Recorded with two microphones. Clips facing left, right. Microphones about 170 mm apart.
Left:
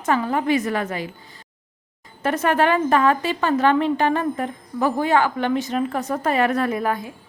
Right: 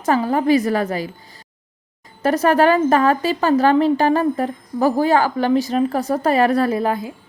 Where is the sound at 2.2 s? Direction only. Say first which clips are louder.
Right 4 dB; 35° right (ahead or behind).